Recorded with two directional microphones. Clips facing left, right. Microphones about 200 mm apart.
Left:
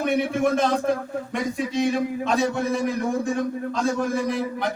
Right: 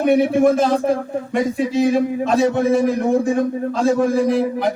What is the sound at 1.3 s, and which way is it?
A man's voice, centre (ahead or behind).